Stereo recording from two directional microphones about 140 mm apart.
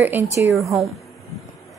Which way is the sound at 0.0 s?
15° right (ahead or behind).